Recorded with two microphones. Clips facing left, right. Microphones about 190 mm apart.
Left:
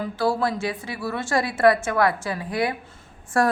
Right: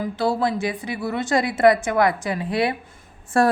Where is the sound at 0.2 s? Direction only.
20° right (ahead or behind).